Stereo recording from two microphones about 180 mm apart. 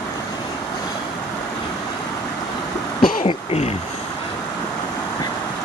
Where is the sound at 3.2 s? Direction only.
35° left (ahead or behind).